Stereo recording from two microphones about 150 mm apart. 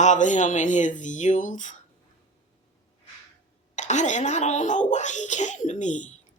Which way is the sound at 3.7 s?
55° left (ahead or behind).